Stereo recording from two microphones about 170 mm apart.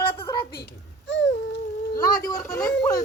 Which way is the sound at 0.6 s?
85° left.